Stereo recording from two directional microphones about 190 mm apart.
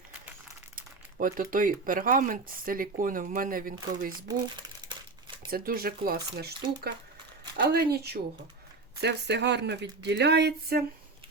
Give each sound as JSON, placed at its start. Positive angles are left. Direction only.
{"t": 0.8, "sound": "speech", "side_deg": -45}
{"t": 5.5, "sound": "speech", "side_deg": -50}